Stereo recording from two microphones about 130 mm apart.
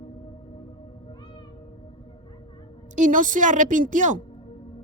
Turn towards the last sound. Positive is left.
turn(degrees=-80)